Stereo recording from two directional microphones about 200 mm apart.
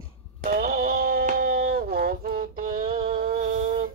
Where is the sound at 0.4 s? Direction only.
45° right (ahead or behind).